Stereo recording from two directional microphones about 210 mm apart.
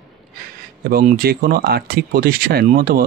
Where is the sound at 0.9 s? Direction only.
45° right (ahead or behind).